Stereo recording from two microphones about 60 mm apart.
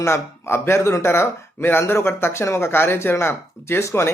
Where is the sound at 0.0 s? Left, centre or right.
Left.